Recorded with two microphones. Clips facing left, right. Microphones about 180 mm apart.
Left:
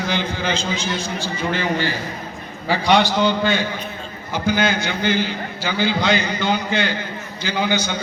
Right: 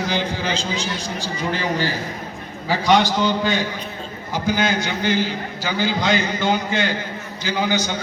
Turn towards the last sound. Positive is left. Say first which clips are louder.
# even
turn(degrees=-40)  # may be behind; listen again after turning